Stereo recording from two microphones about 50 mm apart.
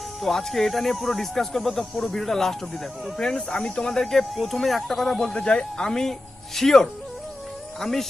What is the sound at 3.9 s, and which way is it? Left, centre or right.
Speech, centre.